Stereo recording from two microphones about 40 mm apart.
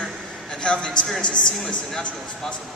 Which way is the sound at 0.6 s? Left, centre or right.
Left.